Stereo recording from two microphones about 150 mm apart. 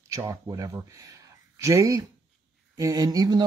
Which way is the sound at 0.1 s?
20° right (ahead or behind).